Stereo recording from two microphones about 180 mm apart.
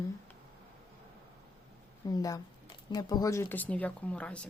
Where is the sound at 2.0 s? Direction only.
20° left (ahead or behind).